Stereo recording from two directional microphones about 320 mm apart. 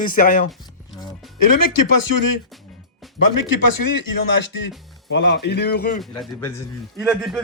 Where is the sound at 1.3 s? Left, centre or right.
Left.